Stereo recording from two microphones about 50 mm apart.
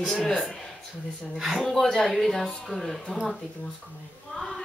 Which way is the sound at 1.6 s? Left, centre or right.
Centre.